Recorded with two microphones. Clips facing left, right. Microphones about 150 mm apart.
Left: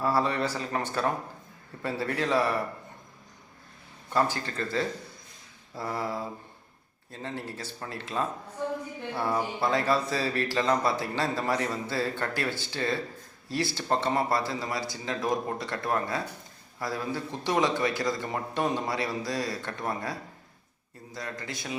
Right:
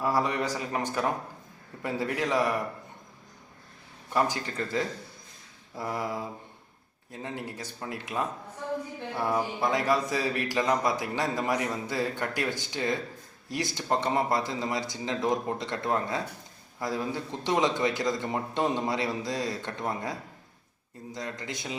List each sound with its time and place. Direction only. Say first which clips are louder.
0.0 s speech: left 1 dB; 15° right (ahead or behind)
4.1 s a man's voice: even; 15° right (ahead or behind)